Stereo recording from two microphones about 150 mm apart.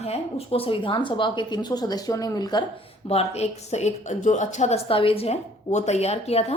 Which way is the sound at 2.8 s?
45° left (ahead or behind).